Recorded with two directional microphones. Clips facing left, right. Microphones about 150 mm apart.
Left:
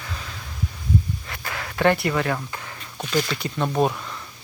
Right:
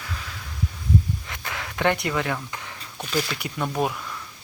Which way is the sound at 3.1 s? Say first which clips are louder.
Left 3 dB; 10° right (ahead or behind).